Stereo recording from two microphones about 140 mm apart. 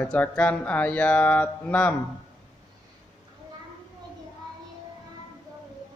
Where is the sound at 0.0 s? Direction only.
10° left (ahead or behind).